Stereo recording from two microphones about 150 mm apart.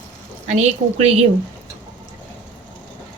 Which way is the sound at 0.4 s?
50° right (ahead or behind).